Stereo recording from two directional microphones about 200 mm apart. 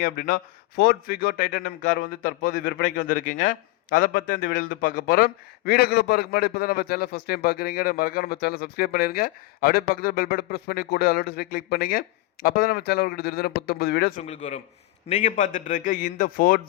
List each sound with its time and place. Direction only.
0.0 s a man's voice: 45° left (ahead or behind)
14.2 s a man's voice: 35° left (ahead or behind)